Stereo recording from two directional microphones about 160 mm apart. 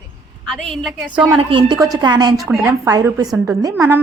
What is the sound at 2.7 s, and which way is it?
A woman's voice, 20° right (ahead or behind).